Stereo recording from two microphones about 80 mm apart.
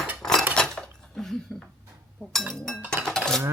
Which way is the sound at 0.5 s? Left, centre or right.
Centre.